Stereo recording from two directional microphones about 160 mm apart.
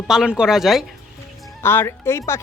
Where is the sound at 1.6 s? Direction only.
15° left (ahead or behind).